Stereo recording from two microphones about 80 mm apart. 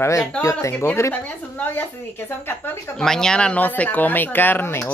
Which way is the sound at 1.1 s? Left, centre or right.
Left.